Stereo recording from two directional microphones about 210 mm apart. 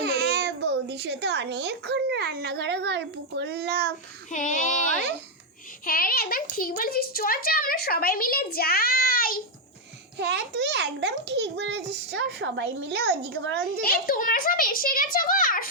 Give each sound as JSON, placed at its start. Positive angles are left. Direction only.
{"t": 0.0, "sound": "a child's voice", "side_deg": -50}
{"t": 4.3, "sound": "child singing", "side_deg": 35}
{"t": 4.9, "sound": "a child's voice", "side_deg": -50}
{"t": 5.8, "sound": "a woman's voice", "side_deg": 45}
{"t": 10.2, "sound": "a child's voice", "side_deg": -55}
{"t": 13.8, "sound": "a woman's voice", "side_deg": 45}